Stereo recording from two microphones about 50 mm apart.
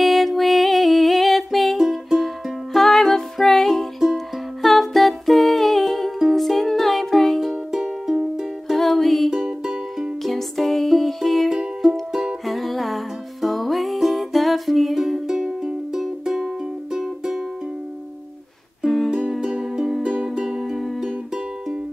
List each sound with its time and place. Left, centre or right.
0.0 s music: centre
4.0 s music: centre
4.6 s music: centre
7.7 s music: centre
8.7 s music: centre
9.3 s music: centre
10.2 s music: centre
11.8 s music: centre
12.4 s music: centre
18.9 s music: centre
19.4 s music: centre